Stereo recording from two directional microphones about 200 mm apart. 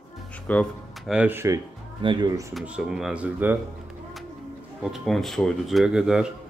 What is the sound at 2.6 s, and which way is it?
Speech, 5° right (ahead or behind).